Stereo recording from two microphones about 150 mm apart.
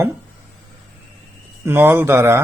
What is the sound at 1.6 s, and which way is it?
Speech, 15° right (ahead or behind).